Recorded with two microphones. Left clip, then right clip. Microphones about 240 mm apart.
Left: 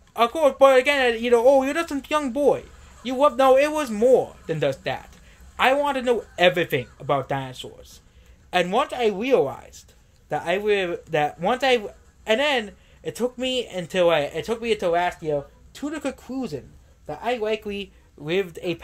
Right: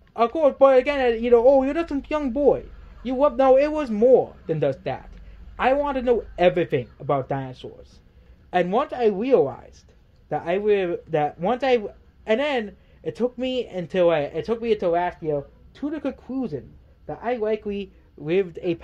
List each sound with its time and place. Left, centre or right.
0.1 s speech: centre